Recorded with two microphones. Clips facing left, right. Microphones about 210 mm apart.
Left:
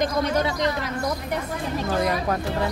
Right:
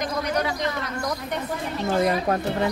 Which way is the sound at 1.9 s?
25° right (ahead or behind).